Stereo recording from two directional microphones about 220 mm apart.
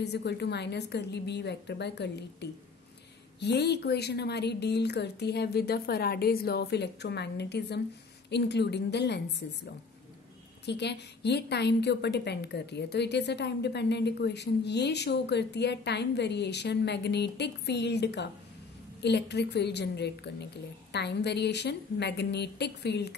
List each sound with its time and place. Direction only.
0.0 s a woman's voice: 50° left (ahead or behind)
10.6 s a woman's voice: 50° left (ahead or behind)